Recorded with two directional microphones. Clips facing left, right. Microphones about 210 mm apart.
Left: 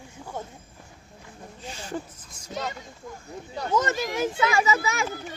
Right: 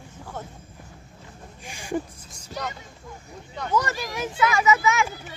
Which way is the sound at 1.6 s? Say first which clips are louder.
Right 4 dB; 15° right (ahead or behind).